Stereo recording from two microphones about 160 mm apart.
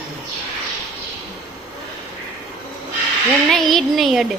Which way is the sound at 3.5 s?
Centre (ahead or behind).